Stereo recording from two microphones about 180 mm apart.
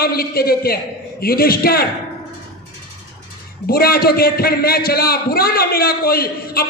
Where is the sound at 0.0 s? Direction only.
55° left (ahead or behind).